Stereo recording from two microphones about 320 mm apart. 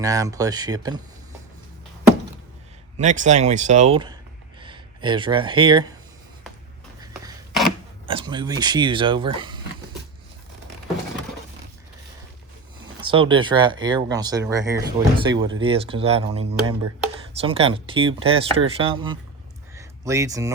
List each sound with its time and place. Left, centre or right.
0.0 s speech: centre
3.0 s speech: right
7.1 s a sound: centre
8.0 s speech: centre
12.8 s speech: centre
19.7 s a sound: centre